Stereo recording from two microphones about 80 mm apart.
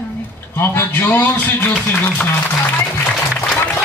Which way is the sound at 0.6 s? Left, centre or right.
Left.